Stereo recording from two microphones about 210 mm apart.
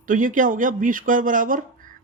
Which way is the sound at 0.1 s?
40° right (ahead or behind).